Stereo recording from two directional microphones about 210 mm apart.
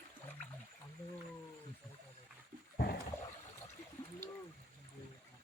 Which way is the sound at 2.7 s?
50° left (ahead or behind).